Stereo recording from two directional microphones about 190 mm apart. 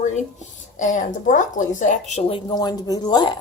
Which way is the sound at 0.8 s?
40° left (ahead or behind).